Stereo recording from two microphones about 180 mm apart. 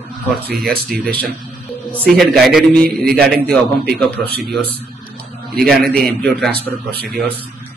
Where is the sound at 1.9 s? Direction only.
5° left (ahead or behind).